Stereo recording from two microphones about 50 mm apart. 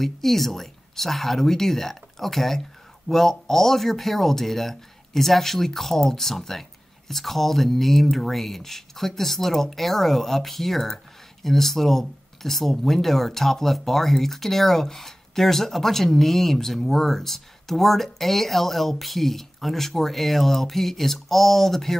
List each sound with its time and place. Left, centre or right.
0.0 s speech: centre